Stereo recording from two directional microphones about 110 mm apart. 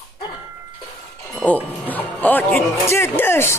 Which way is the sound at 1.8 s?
15° left (ahead or behind).